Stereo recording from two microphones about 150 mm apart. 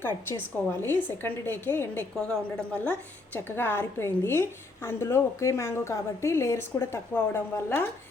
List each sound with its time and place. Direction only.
0.8 s a woman's voice: 15° left (ahead or behind)